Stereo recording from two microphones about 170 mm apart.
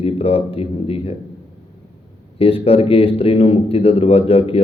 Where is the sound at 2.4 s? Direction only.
35° left (ahead or behind).